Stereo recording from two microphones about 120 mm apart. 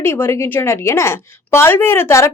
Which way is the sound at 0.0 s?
20° left (ahead or behind).